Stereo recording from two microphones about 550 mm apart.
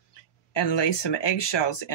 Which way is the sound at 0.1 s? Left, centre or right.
Left.